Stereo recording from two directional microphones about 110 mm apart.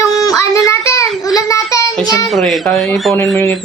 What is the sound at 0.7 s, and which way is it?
Children playing, 25° left (ahead or behind).